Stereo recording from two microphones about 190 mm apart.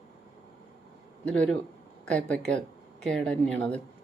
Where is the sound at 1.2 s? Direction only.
5° left (ahead or behind).